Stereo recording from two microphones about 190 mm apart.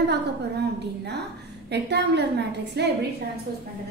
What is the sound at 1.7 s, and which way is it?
A woman's voice, 65° right (ahead or behind).